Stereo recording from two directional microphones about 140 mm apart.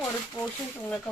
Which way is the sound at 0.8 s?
5° left (ahead or behind).